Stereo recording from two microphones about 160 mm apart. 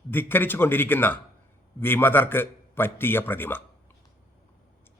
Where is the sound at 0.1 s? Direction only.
10° left (ahead or behind).